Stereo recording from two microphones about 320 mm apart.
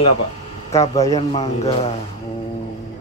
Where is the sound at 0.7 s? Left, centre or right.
Centre.